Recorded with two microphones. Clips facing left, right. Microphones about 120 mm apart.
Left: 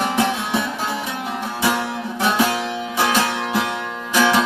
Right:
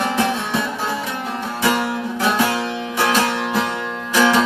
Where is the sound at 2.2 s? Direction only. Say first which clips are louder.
Even; 15° left (ahead or behind).